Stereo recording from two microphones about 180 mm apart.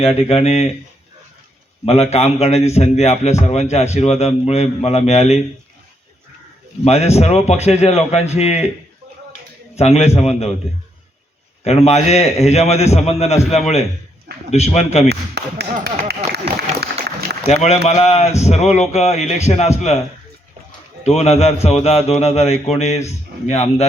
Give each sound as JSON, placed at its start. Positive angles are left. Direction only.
{"t": 0.0, "sound": "a man's voice", "side_deg": 30}
{"t": 1.8, "sound": "a man's voice", "side_deg": 35}
{"t": 6.8, "sound": "a man's voice", "side_deg": 35}
{"t": 9.7, "sound": "a man's voice", "side_deg": 35}
{"t": 11.6, "sound": "a man's voice", "side_deg": 35}
{"t": 15.4, "sound": "a sound", "side_deg": -65}
{"t": 16.8, "sound": "applause", "side_deg": -60}
{"t": 17.4, "sound": "a man's voice", "side_deg": 40}
{"t": 21.0, "sound": "a man's voice", "side_deg": 35}